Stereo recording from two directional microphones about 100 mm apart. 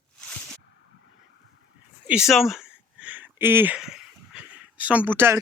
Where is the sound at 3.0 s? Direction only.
15° right (ahead or behind).